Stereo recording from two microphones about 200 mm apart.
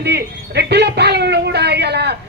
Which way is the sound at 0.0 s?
55° right (ahead or behind).